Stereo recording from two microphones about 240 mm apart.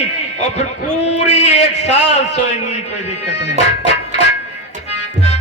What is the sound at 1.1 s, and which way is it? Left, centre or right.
A man's voice, left.